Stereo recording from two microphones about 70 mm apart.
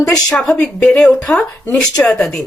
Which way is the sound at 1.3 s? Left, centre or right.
Centre.